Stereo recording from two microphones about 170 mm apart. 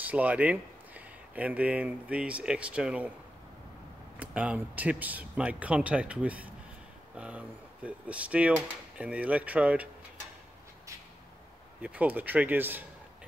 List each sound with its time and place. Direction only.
0.0 s speech: 10° right (ahead or behind)
4.2 s speech: 5° right (ahead or behind)
11.8 s speech: 10° right (ahead or behind)